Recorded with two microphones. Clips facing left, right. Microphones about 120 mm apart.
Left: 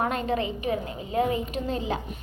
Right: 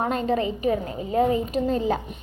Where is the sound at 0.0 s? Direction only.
35° right (ahead or behind).